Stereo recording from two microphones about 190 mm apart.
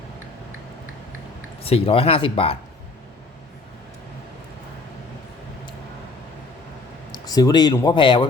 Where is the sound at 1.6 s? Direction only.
30° left (ahead or behind).